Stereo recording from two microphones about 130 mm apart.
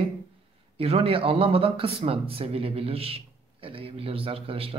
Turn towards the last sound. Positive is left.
turn(degrees=-45)  # may be behind; listen again after turning